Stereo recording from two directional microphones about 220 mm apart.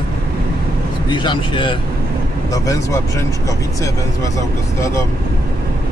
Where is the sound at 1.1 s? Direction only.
20° left (ahead or behind).